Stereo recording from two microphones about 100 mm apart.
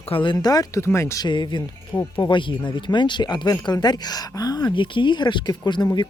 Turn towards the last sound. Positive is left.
turn(degrees=45)  # may be behind; listen again after turning